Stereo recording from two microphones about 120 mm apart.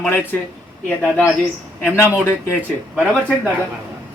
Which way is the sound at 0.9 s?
15° left (ahead or behind).